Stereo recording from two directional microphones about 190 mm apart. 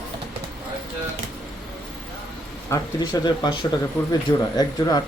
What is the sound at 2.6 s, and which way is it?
Speech, 20° left (ahead or behind).